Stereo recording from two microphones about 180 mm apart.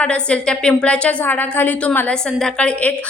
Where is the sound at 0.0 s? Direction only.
5° left (ahead or behind).